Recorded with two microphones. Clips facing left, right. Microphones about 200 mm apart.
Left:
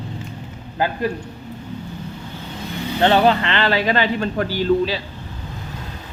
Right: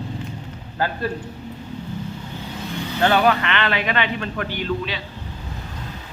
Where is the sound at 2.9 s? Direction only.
25° left (ahead or behind).